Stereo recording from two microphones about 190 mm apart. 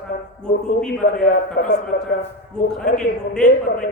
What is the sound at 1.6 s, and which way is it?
Speech, 60° left (ahead or behind).